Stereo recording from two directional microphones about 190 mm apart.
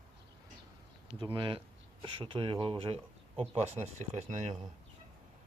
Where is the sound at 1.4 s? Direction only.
25° right (ahead or behind).